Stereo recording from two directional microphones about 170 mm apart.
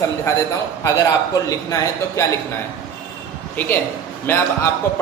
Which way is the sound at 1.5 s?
20° left (ahead or behind).